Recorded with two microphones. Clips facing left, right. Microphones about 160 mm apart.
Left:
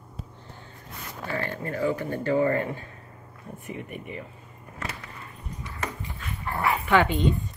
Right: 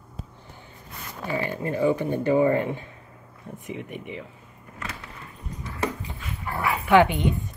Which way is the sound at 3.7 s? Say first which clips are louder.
Right 2 dB; 80° right.